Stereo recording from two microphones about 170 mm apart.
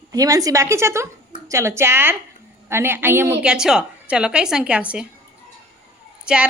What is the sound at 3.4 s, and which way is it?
A woman's voice, 5° right (ahead or behind).